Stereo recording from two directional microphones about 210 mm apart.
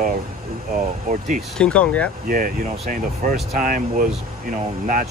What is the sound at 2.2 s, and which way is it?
Speech, 40° right (ahead or behind).